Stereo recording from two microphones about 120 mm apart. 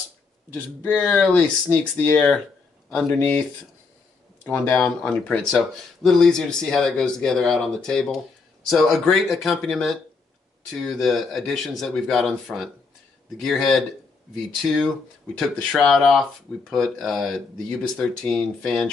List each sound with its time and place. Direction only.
0.6 s speech: 10° left (ahead or behind)
4.5 s speech: 10° left (ahead or behind)